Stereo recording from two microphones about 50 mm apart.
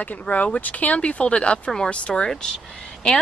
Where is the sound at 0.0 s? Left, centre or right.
Left.